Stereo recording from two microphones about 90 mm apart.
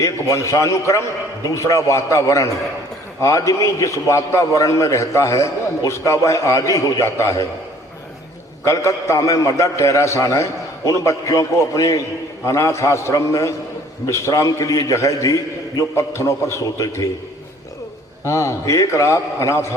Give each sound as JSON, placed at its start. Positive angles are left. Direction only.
{"t": 0.0, "sound": "a man's voice", "side_deg": 35}
{"t": 8.6, "sound": "a man's voice", "side_deg": 35}
{"t": 18.3, "sound": "a man's voice", "side_deg": 30}